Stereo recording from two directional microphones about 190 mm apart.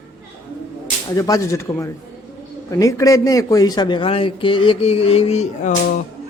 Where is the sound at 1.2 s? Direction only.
15° left (ahead or behind); by 5.7 s 35° left (ahead or behind).